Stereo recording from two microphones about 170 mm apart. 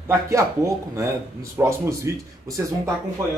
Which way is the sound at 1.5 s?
20° right (ahead or behind).